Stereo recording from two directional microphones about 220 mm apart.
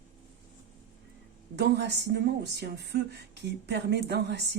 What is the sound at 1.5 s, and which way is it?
Speech, 50° right (ahead or behind).